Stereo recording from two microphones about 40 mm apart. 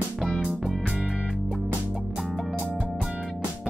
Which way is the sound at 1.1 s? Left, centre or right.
Centre.